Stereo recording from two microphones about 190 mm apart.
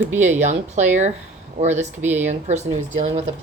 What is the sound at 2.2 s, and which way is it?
Speech, 40° right (ahead or behind).